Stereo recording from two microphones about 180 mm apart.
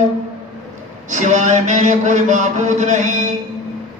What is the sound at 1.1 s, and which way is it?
Mantra, 40° right (ahead or behind).